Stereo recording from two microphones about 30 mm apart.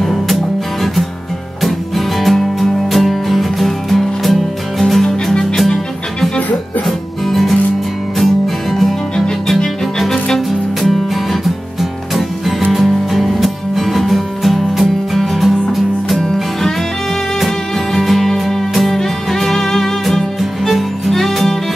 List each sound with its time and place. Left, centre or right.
0.0 s music: centre
1.6 s music: centre
2.3 s music: centre
2.9 s music: centre
7.2 s music: centre
12.2 s music: centre
17.9 s music: centre
20.1 s music: centre